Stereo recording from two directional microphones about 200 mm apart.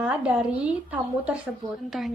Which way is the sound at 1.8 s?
Centre (ahead or behind).